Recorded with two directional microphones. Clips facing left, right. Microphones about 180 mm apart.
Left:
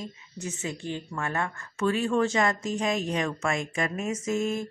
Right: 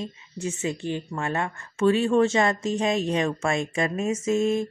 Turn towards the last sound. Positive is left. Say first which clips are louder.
# right 5 dB
turn(degrees=-25)  # may be behind; listen again after turning